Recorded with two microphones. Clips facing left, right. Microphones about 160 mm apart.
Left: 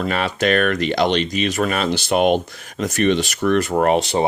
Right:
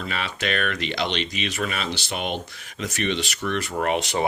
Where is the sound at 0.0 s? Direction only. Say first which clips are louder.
Left 9 dB; 50° left (ahead or behind).